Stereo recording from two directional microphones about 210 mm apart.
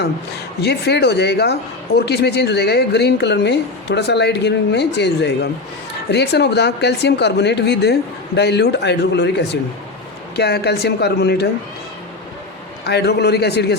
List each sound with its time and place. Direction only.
0.6 s speech: 50° left (ahead or behind)
12.8 s speech: 50° left (ahead or behind)